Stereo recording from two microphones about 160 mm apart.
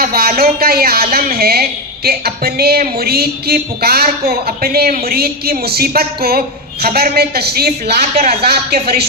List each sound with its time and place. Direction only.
0.0 s a woman's voice: 70° right (ahead or behind)